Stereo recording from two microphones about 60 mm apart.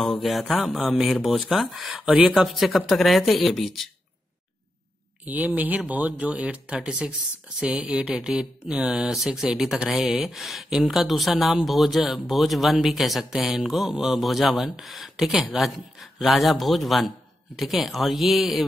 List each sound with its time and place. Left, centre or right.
0.0 s speech: centre
2.0 s a sound: centre
2.3 s speech: centre
5.2 s speech: right
6.8 s a sound: centre
10.3 s speech: centre